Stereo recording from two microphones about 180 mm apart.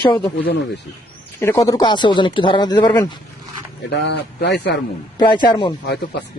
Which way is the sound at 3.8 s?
70° left (ahead or behind).